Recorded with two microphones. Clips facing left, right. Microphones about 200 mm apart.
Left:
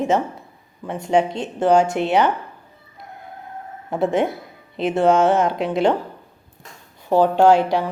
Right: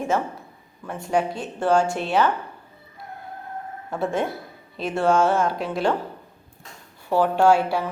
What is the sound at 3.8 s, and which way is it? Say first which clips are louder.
A woman's voice: left 5 dB; 20° left (ahead or behind).